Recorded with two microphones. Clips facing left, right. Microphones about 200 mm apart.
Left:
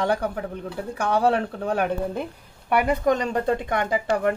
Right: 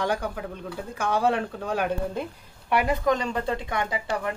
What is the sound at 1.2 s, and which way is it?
Speech, 60° left (ahead or behind).